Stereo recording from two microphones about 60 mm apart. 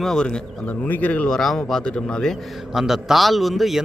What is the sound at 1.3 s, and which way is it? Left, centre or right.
Speech, centre.